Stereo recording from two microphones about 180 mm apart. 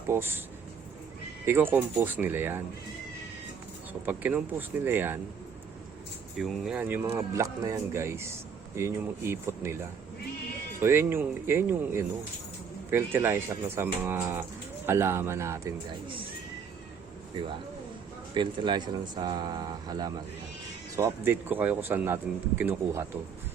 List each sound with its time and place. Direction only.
0.1 s speech: 10° right (ahead or behind)
1.5 s speech: 10° right (ahead or behind)
4.0 s speech: 10° right (ahead or behind)
6.3 s speech: centre (ahead or behind)
10.8 s speech: 15° right (ahead or behind)
18.3 s speech: 25° right (ahead or behind)